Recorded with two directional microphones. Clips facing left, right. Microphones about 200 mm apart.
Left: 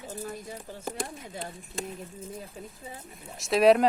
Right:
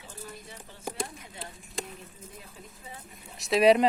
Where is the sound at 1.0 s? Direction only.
Centre (ahead or behind).